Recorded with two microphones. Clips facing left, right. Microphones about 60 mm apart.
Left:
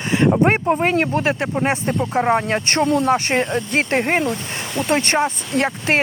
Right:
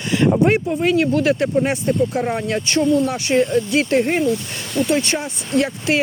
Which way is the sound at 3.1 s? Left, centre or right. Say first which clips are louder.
Right 1 dB; left.